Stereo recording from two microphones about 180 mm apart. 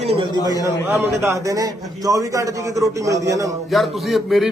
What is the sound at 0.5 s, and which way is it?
Speech, 20° left (ahead or behind).